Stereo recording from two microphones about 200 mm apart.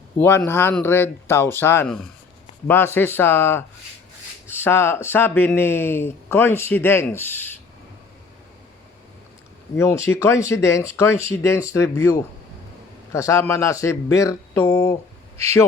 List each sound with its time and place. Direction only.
0.2 s speech: 10° left (ahead or behind)
9.7 s speech: 15° left (ahead or behind)